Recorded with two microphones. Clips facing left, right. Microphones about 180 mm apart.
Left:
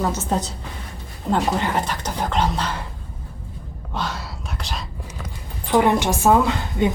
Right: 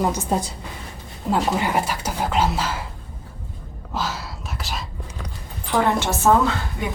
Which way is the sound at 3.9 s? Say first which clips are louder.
Right 1 dB; centre (ahead or behind).